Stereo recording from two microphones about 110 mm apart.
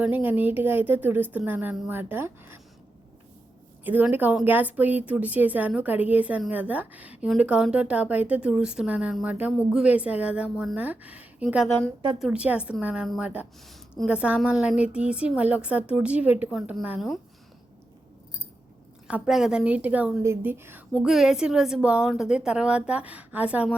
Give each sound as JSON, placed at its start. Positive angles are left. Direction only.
{"t": 0.0, "sound": "a woman's voice", "side_deg": -15}
{"t": 3.8, "sound": "a woman's voice", "side_deg": -15}
{"t": 11.4, "sound": "a woman's voice", "side_deg": 0}
{"t": 19.0, "sound": "a woman's voice", "side_deg": -10}
{"t": 20.2, "sound": "speech", "side_deg": -20}
{"t": 20.9, "sound": "a woman's voice", "side_deg": -5}